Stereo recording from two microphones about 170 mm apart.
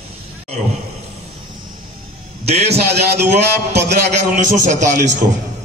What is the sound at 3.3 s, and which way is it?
Speech, 80° right.